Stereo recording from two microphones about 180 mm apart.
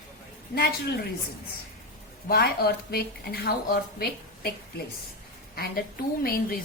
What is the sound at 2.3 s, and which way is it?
Speech, 60° left (ahead or behind).